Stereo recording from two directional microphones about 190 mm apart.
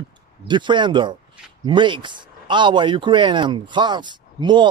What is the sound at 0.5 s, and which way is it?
Speech, 25° right (ahead or behind).